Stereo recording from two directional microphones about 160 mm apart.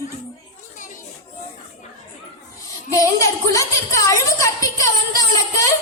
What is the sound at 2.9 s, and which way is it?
A woman's voice, 20° left (ahead or behind).